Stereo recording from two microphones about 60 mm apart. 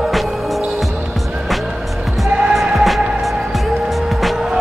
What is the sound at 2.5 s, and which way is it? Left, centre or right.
Music, centre.